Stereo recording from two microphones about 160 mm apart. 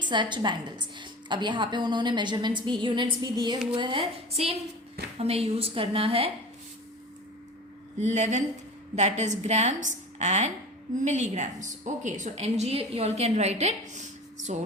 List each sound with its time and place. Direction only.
0.0 s a woman's voice: 30° right (ahead or behind)
7.9 s a woman's voice: 45° right (ahead or behind)